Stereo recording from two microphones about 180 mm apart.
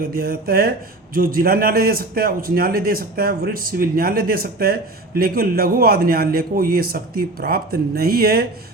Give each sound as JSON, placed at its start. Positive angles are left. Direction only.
{"t": 0.0, "sound": "a man's voice", "side_deg": -55}